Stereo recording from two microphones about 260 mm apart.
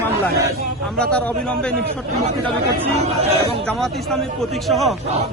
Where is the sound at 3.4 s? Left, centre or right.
Centre.